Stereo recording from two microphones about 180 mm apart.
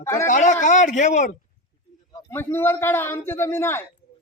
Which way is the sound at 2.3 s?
10° left (ahead or behind).